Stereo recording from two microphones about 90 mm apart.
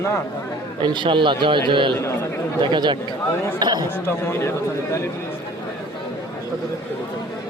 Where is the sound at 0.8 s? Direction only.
60° right (ahead or behind).